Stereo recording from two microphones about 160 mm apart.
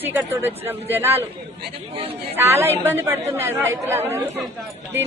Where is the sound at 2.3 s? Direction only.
15° right (ahead or behind).